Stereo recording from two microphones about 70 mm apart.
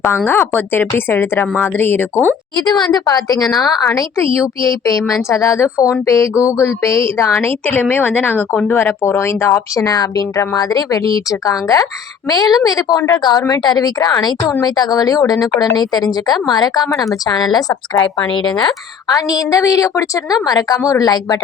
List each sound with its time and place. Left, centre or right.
0.3 s a woman's voice: left
2.6 s a woman's voice: left
3.8 s a woman's voice: left
9.8 s a woman's voice: left
12.3 s a woman's voice: left
13.5 s speech: left
14.6 s a woman's voice: left
19.1 s a woman's voice: left